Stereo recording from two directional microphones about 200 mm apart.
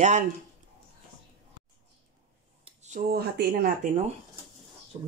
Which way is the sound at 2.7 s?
40° right (ahead or behind).